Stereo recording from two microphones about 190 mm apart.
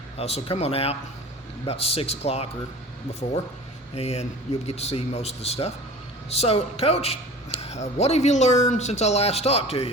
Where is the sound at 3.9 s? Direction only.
35° left (ahead or behind).